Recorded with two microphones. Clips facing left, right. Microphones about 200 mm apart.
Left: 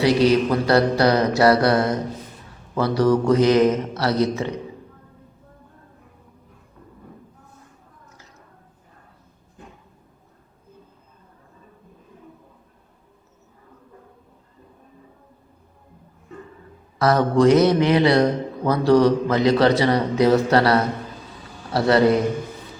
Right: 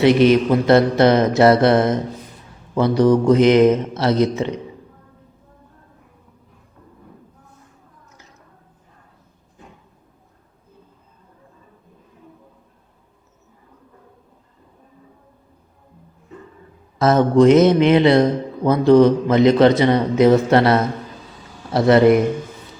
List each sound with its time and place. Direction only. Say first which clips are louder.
0.0 s a man's voice: right 4 dB; 20° right (ahead or behind)
17.0 s a man's voice: right 4 dB; 20° right (ahead or behind)